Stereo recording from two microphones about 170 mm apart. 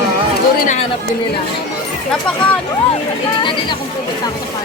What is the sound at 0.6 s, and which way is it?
Speech, 45° left (ahead or behind).